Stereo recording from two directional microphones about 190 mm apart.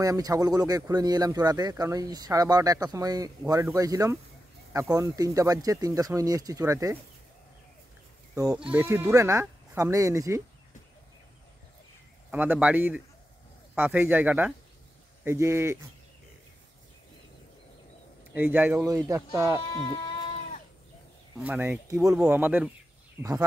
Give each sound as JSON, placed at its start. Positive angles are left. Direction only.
{"t": 0.0, "sound": "speech", "side_deg": -20}
{"t": 8.7, "sound": "speech", "side_deg": -15}
{"t": 12.3, "sound": "speech", "side_deg": -10}
{"t": 18.3, "sound": "speech", "side_deg": -10}
{"t": 19.7, "sound": "speech", "side_deg": 25}
{"t": 21.4, "sound": "speech", "side_deg": -10}